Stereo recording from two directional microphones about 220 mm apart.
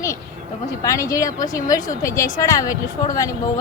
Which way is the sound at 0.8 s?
15° left (ahead or behind).